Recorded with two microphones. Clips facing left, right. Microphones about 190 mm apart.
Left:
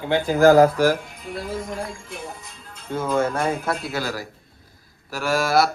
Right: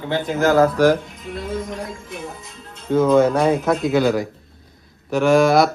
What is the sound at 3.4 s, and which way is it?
Speech, 15° right (ahead or behind).